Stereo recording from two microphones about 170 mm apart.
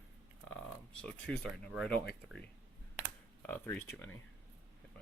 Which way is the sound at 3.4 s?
10° left (ahead or behind).